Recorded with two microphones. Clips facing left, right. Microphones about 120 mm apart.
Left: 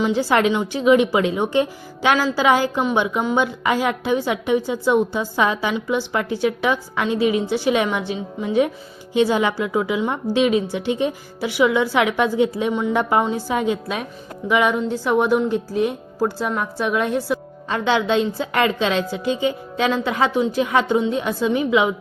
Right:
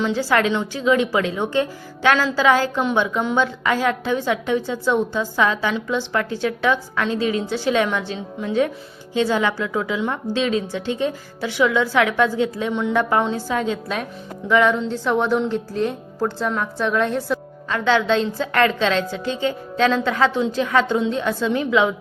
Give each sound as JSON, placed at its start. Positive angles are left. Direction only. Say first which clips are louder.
{"t": 0.0, "sound": "a woman's voice", "louder": "left 2 dB", "side_deg": 15}